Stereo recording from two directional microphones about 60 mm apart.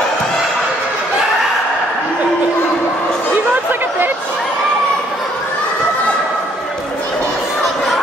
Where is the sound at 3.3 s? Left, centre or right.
Right.